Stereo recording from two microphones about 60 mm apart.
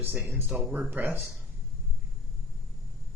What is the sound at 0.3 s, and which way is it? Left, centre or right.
Speech, right.